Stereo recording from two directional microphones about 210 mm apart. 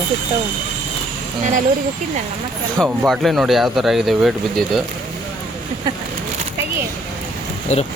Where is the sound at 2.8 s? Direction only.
Centre (ahead or behind).